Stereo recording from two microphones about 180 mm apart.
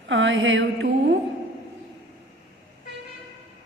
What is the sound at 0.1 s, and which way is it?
Speech, 90° right.